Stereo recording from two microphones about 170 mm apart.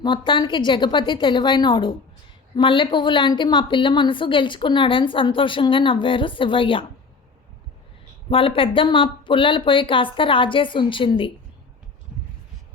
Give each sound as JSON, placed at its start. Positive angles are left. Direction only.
{"t": 0.0, "sound": "a woman's voice", "side_deg": 30}
{"t": 8.3, "sound": "a woman's voice", "side_deg": 30}